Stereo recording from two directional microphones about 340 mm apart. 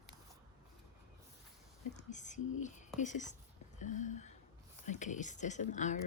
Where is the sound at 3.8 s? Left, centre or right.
Left.